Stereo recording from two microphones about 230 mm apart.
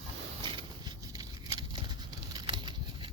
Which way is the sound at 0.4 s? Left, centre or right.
Centre.